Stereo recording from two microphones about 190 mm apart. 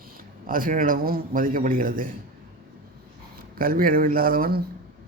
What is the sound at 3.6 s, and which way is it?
A man's voice, 50° right (ahead or behind).